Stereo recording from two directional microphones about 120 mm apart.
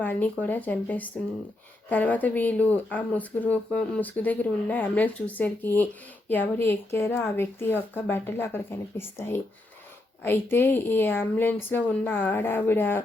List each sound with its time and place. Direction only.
0.0 s speech: 15° left (ahead or behind)